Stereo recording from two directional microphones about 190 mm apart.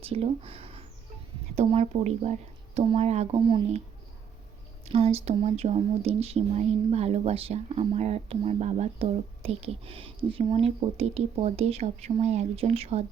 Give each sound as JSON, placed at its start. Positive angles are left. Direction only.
{"t": 0.0, "sound": "speech", "side_deg": -30}
{"t": 4.9, "sound": "speech", "side_deg": -35}